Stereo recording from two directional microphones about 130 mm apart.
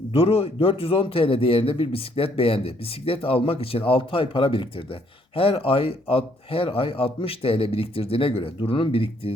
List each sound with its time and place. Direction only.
0.1 s a man's voice: 50° left (ahead or behind)